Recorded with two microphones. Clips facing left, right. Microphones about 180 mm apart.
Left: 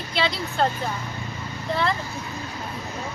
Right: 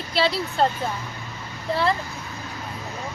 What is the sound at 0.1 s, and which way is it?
Speech, 5° right (ahead or behind).